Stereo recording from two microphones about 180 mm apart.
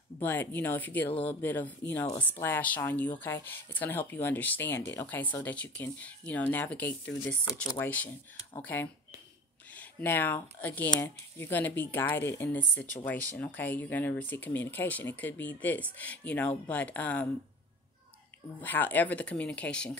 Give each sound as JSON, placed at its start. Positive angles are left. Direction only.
{"t": 0.2, "sound": "speech", "side_deg": 10}
{"t": 18.6, "sound": "speech", "side_deg": 10}